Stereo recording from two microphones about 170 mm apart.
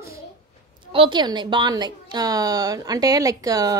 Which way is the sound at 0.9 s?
30° right (ahead or behind).